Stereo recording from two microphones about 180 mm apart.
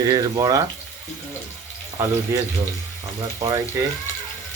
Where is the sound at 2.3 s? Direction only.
15° right (ahead or behind).